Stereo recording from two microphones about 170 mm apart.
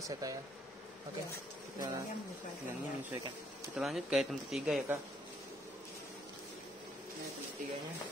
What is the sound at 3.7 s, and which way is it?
Speech, centre (ahead or behind).